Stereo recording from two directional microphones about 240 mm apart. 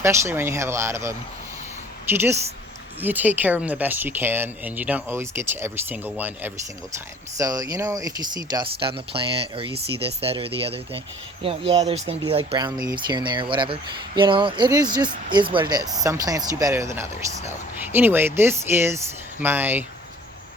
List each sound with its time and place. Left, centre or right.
0.0 s speech: centre